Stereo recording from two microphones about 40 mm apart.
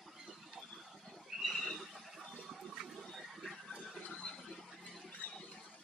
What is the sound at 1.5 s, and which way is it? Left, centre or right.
Neigh, centre.